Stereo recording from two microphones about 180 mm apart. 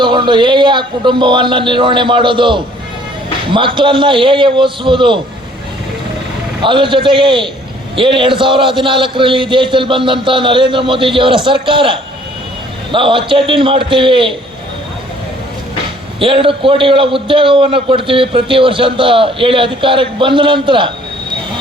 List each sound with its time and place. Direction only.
0.0 s a man's voice: 25° right (ahead or behind)
6.6 s a man's voice: 25° right (ahead or behind)
16.2 s a man's voice: 30° right (ahead or behind)